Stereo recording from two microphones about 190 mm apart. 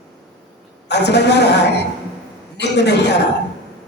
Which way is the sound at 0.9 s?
60° left (ahead or behind).